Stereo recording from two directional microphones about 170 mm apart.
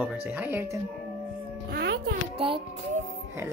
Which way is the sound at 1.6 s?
70° right (ahead or behind).